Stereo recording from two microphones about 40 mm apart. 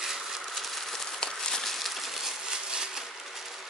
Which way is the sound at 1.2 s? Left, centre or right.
Centre.